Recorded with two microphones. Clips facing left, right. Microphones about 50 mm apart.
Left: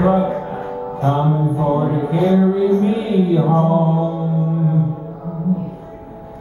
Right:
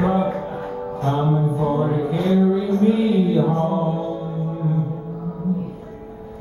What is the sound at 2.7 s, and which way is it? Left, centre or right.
Mantra, centre.